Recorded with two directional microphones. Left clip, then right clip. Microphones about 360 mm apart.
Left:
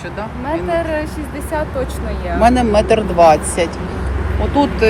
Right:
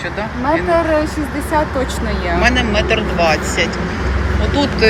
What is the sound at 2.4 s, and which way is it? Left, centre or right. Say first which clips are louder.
Speech: left 4 dB; centre.